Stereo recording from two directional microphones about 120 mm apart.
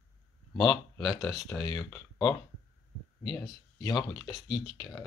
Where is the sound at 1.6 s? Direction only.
30° left (ahead or behind).